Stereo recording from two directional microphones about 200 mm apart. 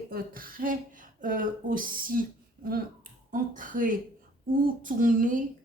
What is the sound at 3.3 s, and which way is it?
Speech, 40° right (ahead or behind).